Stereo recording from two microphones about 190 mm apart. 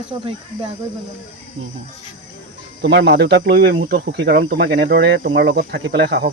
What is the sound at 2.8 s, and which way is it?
Speech, 65° right (ahead or behind).